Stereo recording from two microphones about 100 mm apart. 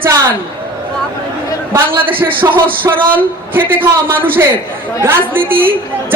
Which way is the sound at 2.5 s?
60° right (ahead or behind).